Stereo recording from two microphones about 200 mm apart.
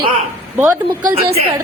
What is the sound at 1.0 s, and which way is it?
Speech, 50° right (ahead or behind).